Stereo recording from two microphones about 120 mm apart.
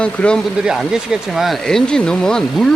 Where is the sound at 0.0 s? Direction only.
10° left (ahead or behind).